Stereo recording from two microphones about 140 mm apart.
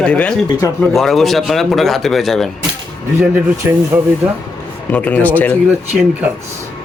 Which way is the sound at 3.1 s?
15° right (ahead or behind).